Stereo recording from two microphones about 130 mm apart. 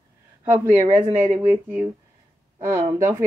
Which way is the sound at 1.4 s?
15° right (ahead or behind).